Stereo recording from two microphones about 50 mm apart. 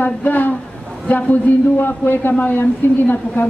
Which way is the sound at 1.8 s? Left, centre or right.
Left.